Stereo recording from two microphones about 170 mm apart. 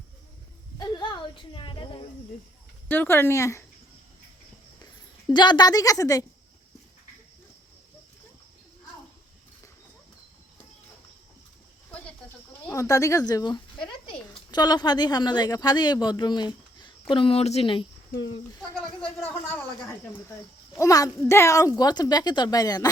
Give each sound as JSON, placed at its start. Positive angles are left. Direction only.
{"t": 0.8, "sound": "a sound", "side_deg": 25}
{"t": 2.9, "sound": "speech", "side_deg": 10}
{"t": 5.3, "sound": "a woman's voice", "side_deg": 25}
{"t": 11.9, "sound": "a sound", "side_deg": 10}
{"t": 12.6, "sound": "speech", "side_deg": 15}
{"t": 19.5, "sound": "a woman's voice", "side_deg": 10}